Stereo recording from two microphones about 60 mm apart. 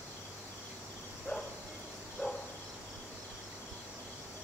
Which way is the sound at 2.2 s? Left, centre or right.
Left.